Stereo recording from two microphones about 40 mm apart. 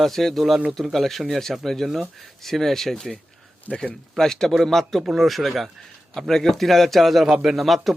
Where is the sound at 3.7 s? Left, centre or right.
Left.